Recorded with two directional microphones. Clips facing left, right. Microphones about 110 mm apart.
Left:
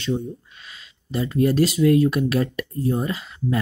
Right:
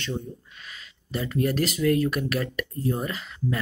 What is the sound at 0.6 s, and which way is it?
Speech, 25° left (ahead or behind).